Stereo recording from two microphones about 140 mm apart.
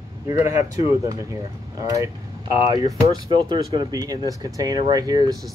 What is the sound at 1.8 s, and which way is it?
Speech, 25° right (ahead or behind).